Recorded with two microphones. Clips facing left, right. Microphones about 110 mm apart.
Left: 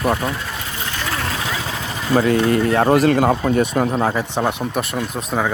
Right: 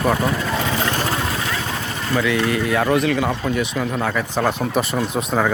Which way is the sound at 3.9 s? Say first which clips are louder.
Left 3 dB; 30° left (ahead or behind).